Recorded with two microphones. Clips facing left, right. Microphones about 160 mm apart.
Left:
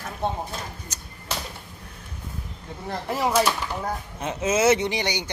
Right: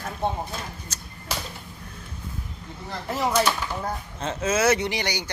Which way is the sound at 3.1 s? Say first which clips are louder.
Left 1 dB; 5° left (ahead or behind).